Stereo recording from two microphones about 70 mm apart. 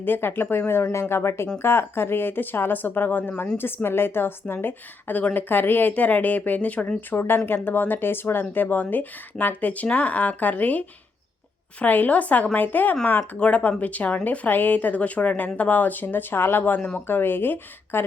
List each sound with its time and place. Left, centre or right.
0.0 s speech: left